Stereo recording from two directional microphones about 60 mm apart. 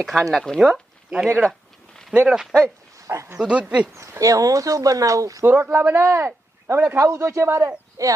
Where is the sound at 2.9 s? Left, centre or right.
Right.